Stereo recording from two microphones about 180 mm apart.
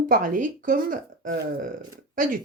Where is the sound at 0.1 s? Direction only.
45° right (ahead or behind).